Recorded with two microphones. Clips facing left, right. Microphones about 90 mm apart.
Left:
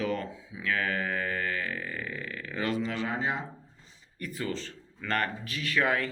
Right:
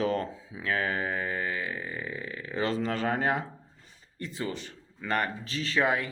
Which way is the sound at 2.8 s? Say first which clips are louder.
Right 3 dB; 45° right (ahead or behind).